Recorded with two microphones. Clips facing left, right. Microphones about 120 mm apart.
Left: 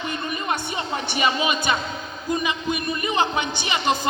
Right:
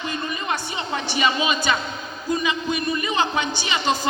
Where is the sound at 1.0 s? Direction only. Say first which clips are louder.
Right 1 dB; 55° left (ahead or behind).